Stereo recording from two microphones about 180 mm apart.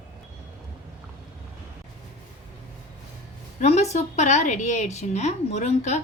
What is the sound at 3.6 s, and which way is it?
A woman's voice, 35° left (ahead or behind).